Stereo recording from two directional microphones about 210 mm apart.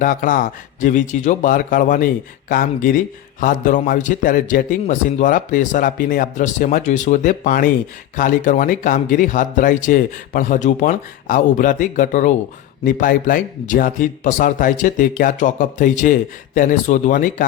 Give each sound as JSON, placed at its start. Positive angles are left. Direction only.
{"t": 0.0, "sound": "a man's voice", "side_deg": 40}